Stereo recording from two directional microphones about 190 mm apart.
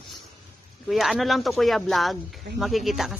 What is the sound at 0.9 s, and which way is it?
Speech, centre (ahead or behind).